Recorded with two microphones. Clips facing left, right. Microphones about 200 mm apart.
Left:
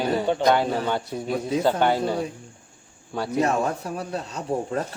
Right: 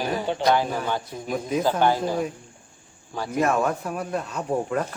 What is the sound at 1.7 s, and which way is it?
Speech, 65° left (ahead or behind).